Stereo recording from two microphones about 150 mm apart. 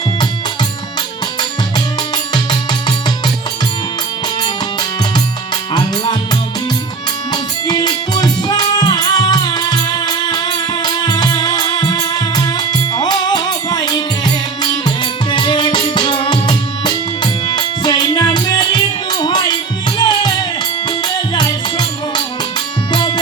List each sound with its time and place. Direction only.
2.3 s music: 30° left (ahead or behind)
4.4 s music: 30° left (ahead or behind)
7.7 s music: 30° left (ahead or behind)
21.3 s music: 30° left (ahead or behind)